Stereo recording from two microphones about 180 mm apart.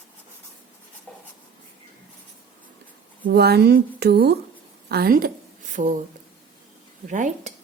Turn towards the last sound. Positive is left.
turn(degrees=-45)  # may be behind; listen again after turning